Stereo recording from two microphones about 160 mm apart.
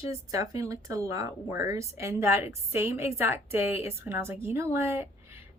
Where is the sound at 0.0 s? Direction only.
20° right (ahead or behind).